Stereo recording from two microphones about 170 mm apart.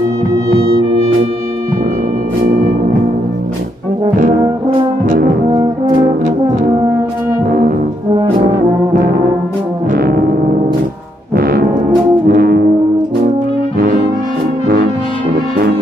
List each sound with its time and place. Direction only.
9.9 s music: 65° right (ahead or behind)
11.3 s brass instrument: 60° right (ahead or behind)
12.3 s music: 60° right (ahead or behind)